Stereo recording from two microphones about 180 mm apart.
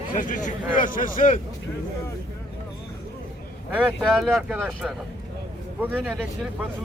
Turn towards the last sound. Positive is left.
turn(degrees=-10)  # may be behind; listen again after turning